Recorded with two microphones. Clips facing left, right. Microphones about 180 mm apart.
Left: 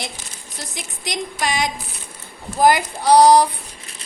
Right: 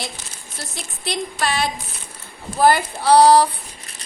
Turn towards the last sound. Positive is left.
turn(degrees=15)  # may be behind; listen again after turning